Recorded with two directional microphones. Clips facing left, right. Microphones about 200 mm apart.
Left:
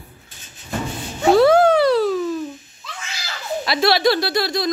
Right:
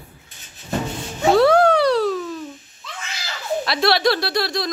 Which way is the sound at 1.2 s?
Centre (ahead or behind).